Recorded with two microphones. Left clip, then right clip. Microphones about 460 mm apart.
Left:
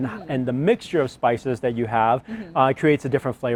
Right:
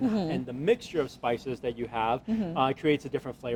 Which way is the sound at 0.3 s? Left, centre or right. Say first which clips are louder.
Left 10 dB; left.